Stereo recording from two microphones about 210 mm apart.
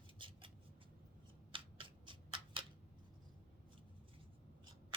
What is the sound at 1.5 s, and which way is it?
Shuffling cards, 25° right (ahead or behind).